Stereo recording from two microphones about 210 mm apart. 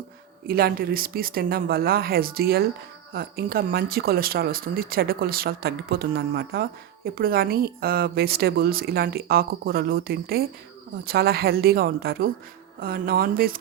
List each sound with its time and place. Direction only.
0.4 s speech: 45° right (ahead or behind)